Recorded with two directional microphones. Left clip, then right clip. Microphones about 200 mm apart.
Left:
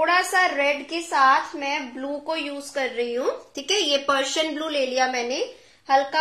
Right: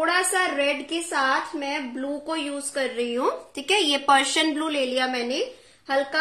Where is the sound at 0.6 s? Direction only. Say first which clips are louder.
Left 1 dB; 40° right (ahead or behind).